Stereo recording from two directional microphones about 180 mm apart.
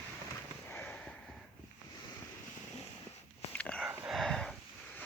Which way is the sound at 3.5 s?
5° left (ahead or behind).